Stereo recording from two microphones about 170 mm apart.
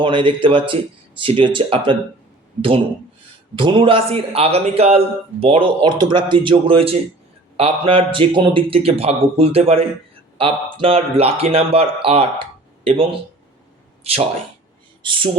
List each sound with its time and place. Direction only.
0.0 s a man's voice: 30° right (ahead or behind)